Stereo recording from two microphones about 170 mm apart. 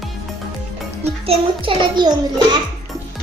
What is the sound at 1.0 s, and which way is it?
A child's voice, 35° right (ahead or behind).